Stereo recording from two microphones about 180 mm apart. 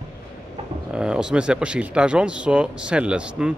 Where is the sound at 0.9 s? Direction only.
5° right (ahead or behind).